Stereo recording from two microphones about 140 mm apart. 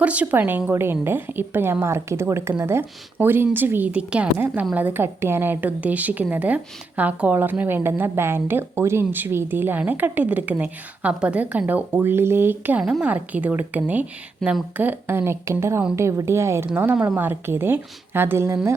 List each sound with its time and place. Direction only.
0.0 s a woman's voice: 10° right (ahead or behind)